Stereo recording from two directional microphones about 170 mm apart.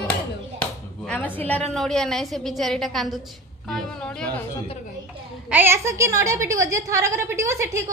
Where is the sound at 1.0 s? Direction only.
10° left (ahead or behind).